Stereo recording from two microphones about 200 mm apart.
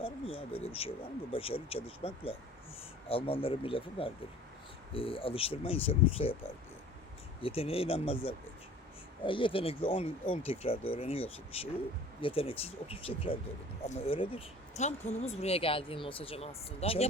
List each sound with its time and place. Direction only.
0.0 s speech: 30° left (ahead or behind)
7.4 s speech: 30° left (ahead or behind)